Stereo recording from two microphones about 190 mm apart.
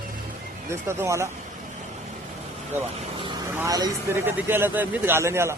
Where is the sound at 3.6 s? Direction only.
20° right (ahead or behind).